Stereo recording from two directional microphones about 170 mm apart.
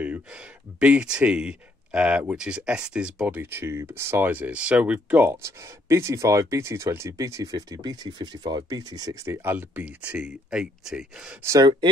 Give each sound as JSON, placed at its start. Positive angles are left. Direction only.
{"t": 0.0, "sound": "speech", "side_deg": -10}
{"t": 11.4, "sound": "speech", "side_deg": -20}